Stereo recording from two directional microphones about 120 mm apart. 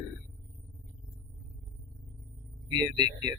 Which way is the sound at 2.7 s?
35° right (ahead or behind).